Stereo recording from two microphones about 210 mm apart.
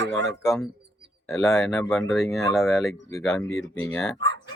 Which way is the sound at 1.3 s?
15° left (ahead or behind).